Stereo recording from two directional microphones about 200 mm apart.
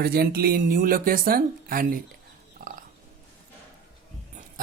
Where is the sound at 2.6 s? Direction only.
45° right (ahead or behind).